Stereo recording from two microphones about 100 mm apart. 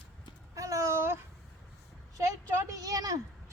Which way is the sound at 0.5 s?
35° right (ahead or behind).